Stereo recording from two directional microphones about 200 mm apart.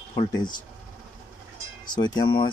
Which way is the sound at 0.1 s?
20° left (ahead or behind).